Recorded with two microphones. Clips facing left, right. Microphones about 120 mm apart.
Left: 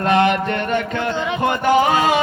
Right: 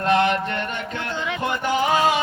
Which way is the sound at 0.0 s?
65° left (ahead or behind).